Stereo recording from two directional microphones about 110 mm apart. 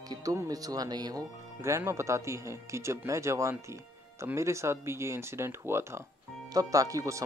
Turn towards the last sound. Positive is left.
turn(degrees=-30)  # may be behind; listen again after turning